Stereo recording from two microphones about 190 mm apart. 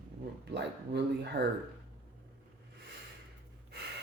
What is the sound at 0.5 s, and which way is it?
Speech, 65° right (ahead or behind).